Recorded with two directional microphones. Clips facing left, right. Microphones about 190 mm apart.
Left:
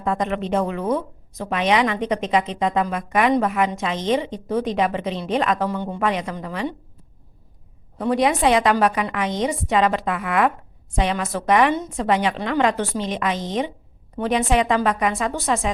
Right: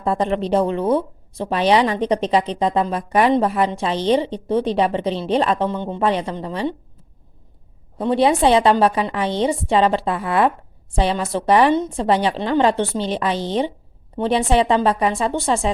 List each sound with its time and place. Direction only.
0.0 s a woman's voice: 35° right (ahead or behind)
7.9 s a woman's voice: 30° right (ahead or behind)